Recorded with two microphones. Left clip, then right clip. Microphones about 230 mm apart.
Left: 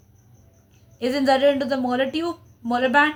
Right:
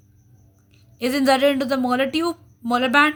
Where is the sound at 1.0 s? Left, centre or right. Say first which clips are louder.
Right 1 dB; right.